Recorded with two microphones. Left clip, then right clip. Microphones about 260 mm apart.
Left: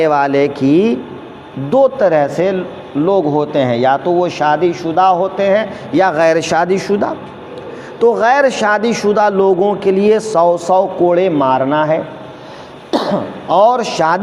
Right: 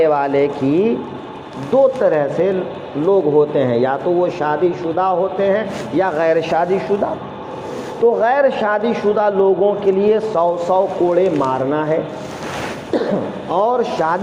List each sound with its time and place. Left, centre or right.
0.0 s a man's voice: left
12.9 s throat clearing: left
13.5 s a man's voice: left